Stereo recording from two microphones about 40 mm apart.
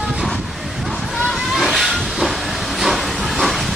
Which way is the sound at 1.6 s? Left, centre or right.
Centre.